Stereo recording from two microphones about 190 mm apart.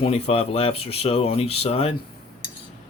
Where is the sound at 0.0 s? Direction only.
30° left (ahead or behind).